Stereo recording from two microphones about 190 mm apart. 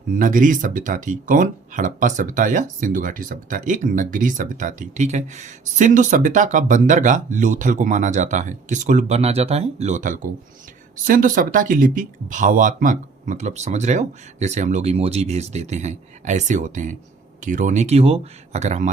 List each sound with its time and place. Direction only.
0.1 s speech: 45° right (ahead or behind)